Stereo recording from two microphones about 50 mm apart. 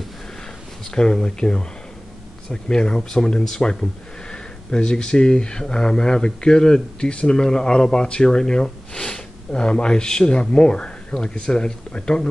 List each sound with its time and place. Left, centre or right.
0.8 s speech: centre